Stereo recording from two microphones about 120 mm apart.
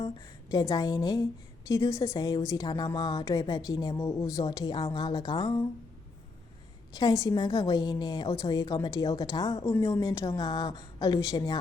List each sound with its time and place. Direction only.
0.5 s a woman's voice: 30° left (ahead or behind)
6.9 s a woman's voice: 30° left (ahead or behind)